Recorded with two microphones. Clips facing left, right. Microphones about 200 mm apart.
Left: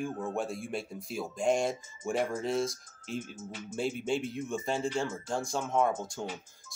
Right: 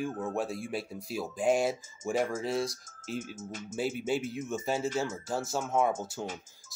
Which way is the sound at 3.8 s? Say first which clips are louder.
Even; 5° right (ahead or behind).